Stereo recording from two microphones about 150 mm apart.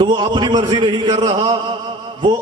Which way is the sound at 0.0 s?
30° right (ahead or behind).